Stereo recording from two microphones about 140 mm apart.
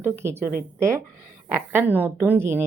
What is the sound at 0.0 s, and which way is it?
Speech, 20° right (ahead or behind).